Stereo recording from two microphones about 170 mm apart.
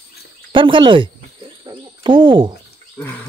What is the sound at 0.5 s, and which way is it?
Speech, 30° right (ahead or behind).